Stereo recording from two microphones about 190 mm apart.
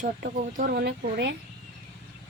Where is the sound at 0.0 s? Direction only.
45° right (ahead or behind).